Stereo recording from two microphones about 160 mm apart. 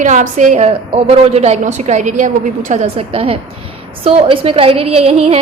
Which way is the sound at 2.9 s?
35° right (ahead or behind).